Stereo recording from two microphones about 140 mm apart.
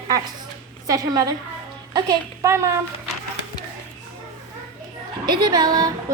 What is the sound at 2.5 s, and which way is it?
Speech, 20° right (ahead or behind).